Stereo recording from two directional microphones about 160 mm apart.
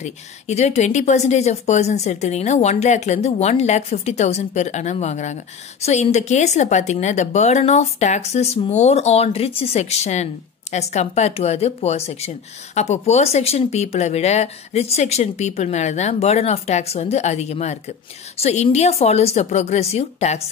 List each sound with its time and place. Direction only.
0.0 s speech: 45° left (ahead or behind)